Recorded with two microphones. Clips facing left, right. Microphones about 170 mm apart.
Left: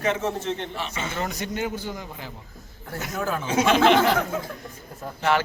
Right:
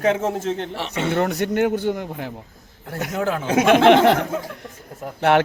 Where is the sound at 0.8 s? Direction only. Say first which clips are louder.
Right 8 dB; 70° right (ahead or behind).